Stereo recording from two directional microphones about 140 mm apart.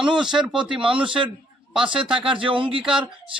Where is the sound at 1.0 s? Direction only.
35° right (ahead or behind).